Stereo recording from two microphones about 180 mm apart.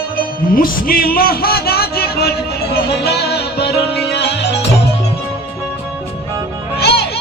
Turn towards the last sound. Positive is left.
turn(degrees=65)  # may be behind; listen again after turning